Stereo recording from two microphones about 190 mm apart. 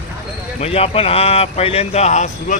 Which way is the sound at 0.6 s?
30° left (ahead or behind).